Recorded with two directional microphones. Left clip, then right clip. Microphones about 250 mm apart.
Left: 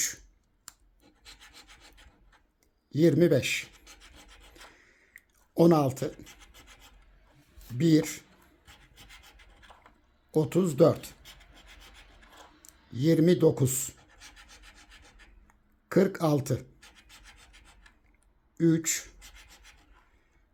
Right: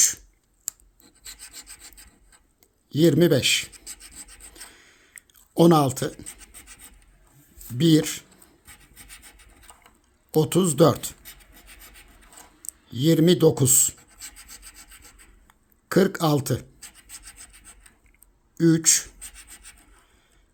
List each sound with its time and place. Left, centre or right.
2.9 s speech: centre
4.8 s chewing: centre
5.5 s speech: centre
7.8 s speech: centre
10.3 s speech: centre
12.6 s speech: centre
15.4 s a sound: centre
18.5 s speech: centre